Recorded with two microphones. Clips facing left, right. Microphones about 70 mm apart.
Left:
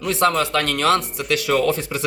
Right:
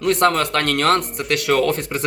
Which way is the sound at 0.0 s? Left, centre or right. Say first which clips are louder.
Right 2 dB; right.